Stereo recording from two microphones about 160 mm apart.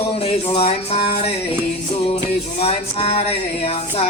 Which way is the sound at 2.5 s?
40° left (ahead or behind).